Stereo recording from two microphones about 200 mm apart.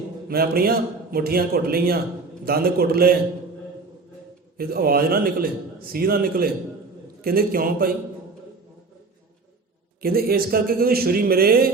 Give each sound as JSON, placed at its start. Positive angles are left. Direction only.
{"t": 0.3, "sound": "a man's voice", "side_deg": -50}
{"t": 4.5, "sound": "a man's voice", "side_deg": -50}
{"t": 10.0, "sound": "a man's voice", "side_deg": -50}